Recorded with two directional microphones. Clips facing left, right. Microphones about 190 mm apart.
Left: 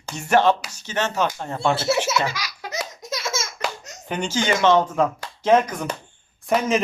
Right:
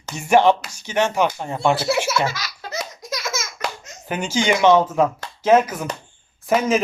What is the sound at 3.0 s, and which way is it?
Laughter, 25° left (ahead or behind).